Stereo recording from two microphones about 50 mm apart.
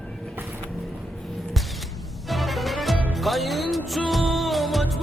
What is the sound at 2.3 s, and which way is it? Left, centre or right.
Music, centre.